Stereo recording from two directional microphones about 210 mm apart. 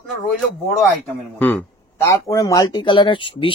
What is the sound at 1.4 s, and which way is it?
Speech, 10° left (ahead or behind).